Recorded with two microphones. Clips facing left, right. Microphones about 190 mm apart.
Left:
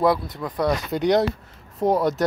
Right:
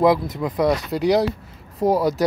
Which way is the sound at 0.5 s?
Centre (ahead or behind).